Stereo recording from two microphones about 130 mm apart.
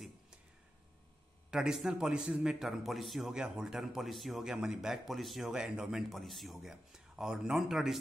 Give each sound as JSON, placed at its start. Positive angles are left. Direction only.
{"t": 1.5, "sound": "a man's voice", "side_deg": -5}